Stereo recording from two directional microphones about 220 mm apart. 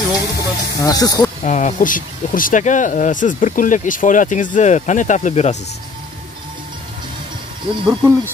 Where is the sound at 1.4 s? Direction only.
30° left (ahead or behind).